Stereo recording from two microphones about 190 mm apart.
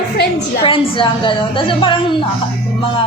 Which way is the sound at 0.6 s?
25° left (ahead or behind).